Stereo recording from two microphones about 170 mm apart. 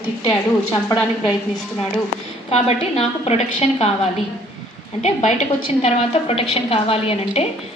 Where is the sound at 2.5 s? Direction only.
35° left (ahead or behind).